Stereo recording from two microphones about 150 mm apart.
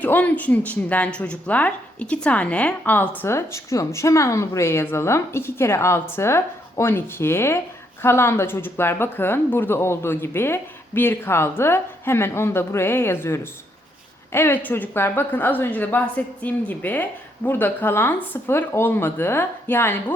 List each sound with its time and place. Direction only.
0.0 s a woman's voice: 10° left (ahead or behind)